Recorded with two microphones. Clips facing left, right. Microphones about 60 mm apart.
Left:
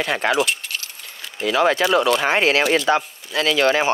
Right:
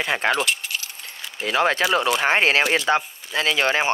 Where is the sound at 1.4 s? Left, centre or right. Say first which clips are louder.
Left 3 dB; right.